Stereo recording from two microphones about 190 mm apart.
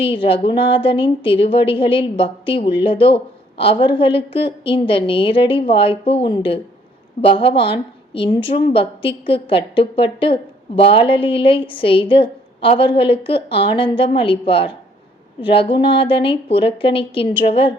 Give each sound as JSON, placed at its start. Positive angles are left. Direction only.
{"t": 0.0, "sound": "a woman's voice", "side_deg": 30}